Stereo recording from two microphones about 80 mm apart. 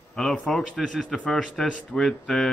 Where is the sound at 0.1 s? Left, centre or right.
Centre.